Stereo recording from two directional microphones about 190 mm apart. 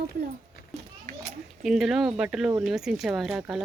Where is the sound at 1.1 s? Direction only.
40° right (ahead or behind).